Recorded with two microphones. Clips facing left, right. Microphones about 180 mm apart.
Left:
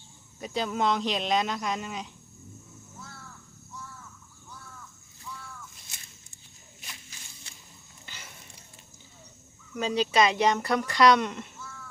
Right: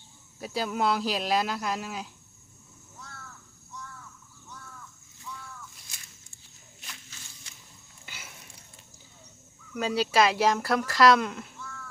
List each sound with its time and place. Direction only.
0.3 s speech: 5° right (ahead or behind)
6.8 s walk: 10° left (ahead or behind)
8.0 s a sound: 10° right (ahead or behind)
9.7 s speech: 5° right (ahead or behind)